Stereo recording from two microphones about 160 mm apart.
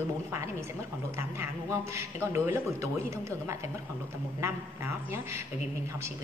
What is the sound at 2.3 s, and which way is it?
Speech, 15° right (ahead or behind).